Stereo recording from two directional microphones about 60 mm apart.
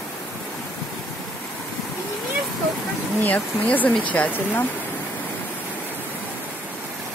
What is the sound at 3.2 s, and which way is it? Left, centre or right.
Speech, left.